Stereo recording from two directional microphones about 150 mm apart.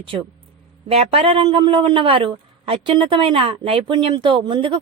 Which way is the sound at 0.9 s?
40° right (ahead or behind).